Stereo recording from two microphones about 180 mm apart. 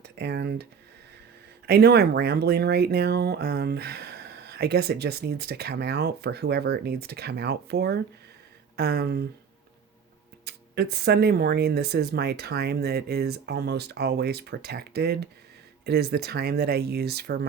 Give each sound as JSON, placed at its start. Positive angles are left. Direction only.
{"t": 0.0, "sound": "speech", "side_deg": -65}
{"t": 10.4, "sound": "speech", "side_deg": -65}